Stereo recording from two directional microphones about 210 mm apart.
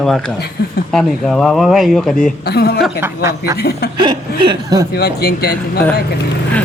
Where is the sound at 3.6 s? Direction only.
50° left (ahead or behind).